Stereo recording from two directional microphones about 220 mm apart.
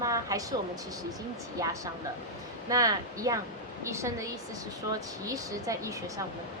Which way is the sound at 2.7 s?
15° right (ahead or behind).